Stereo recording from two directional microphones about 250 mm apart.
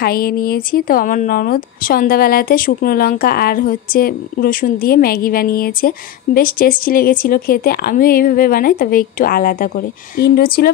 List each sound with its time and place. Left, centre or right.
0.0 s speech: left